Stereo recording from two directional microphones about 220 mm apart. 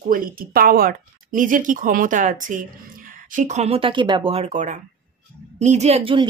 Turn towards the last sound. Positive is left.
turn(degrees=-25)  # may be behind; listen again after turning